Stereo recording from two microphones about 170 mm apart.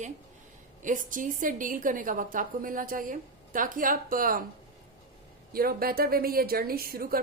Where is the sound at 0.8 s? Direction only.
50° right (ahead or behind).